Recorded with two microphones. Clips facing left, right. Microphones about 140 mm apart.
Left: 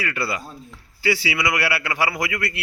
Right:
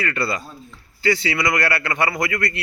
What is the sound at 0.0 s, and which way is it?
A man's voice, 10° left (ahead or behind).